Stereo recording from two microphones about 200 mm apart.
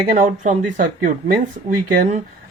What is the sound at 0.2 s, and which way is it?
Speech, 45° right (ahead or behind).